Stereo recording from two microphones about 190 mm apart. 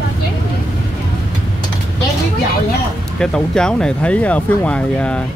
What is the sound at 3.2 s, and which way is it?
Speech, 5° left (ahead or behind).